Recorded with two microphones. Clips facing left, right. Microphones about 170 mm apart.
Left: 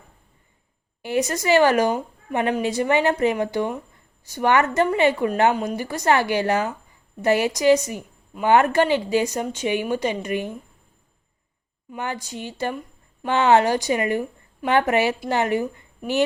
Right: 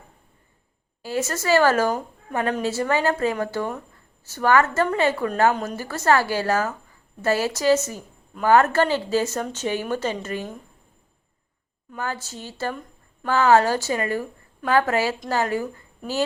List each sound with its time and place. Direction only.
1.0 s a woman's voice: 15° left (ahead or behind)
11.9 s a woman's voice: 15° left (ahead or behind)